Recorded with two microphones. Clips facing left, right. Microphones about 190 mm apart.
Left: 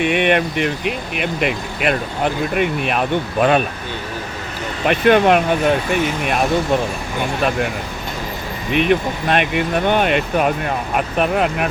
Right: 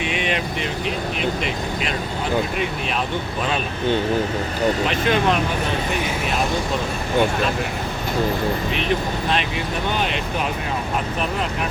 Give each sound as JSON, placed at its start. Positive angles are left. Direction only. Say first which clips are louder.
{"t": 0.0, "sound": "speech", "louder": "left 8 dB", "side_deg": 60}
{"t": 4.9, "sound": "speech", "louder": "left 7 dB", "side_deg": 60}
{"t": 8.7, "sound": "speech", "louder": "left 6 dB", "side_deg": 60}